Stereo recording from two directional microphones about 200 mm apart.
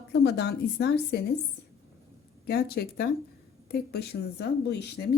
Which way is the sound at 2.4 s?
50° left (ahead or behind).